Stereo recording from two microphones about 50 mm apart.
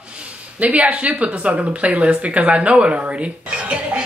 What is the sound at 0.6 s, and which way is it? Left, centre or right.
Speech, right.